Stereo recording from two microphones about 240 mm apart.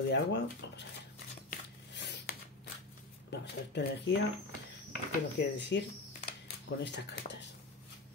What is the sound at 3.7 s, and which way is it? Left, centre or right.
Speech, left.